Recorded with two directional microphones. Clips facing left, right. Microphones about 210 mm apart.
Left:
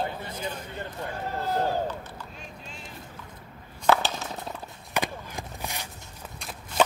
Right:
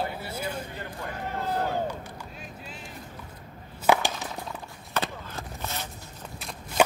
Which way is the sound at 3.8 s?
15° right (ahead or behind).